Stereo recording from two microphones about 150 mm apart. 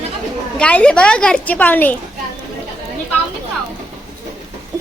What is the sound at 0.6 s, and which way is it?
A woman's voice, 5° left (ahead or behind).